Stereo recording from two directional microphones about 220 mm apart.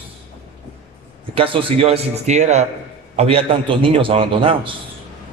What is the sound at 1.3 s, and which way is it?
A man's voice, 25° right (ahead or behind).